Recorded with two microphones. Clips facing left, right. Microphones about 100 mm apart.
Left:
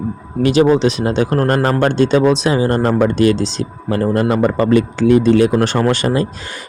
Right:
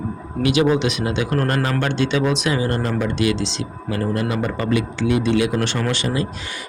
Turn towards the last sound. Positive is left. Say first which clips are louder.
# left 7 dB
turn(degrees=45)  # may be behind; listen again after turning